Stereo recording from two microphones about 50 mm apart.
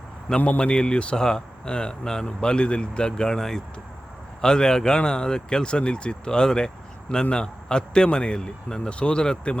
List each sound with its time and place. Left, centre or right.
0.3 s speech: left